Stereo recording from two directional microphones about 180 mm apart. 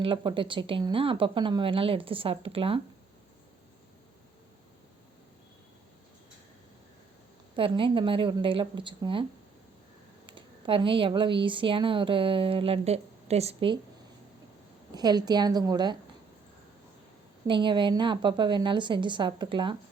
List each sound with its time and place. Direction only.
0.0 s speech: 25° right (ahead or behind)
7.5 s speech: 25° right (ahead or behind)
10.2 s speech: 25° right (ahead or behind)
14.9 s speech: 20° right (ahead or behind)
17.4 s speech: 25° right (ahead or behind)